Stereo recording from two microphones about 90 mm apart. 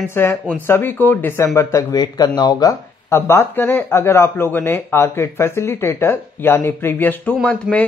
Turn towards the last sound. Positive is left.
turn(degrees=-15)  # may be behind; listen again after turning